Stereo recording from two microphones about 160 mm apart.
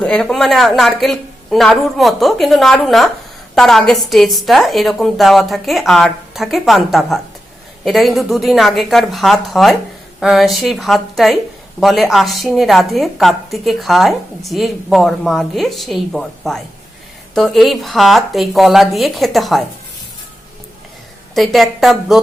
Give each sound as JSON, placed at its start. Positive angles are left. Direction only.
{"t": 0.0, "sound": "a woman's voice", "side_deg": 5}
{"t": 21.3, "sound": "a woman's voice", "side_deg": 0}